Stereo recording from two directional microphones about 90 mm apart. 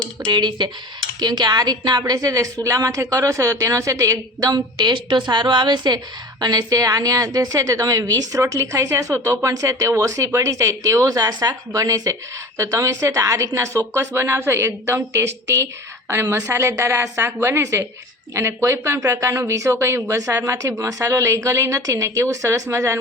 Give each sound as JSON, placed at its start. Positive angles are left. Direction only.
{"t": 0.3, "sound": "a woman's voice", "side_deg": -55}
{"t": 11.7, "sound": "a woman's voice", "side_deg": -40}